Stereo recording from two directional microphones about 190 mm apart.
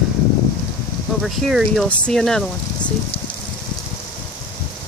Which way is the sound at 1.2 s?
Centre (ahead or behind).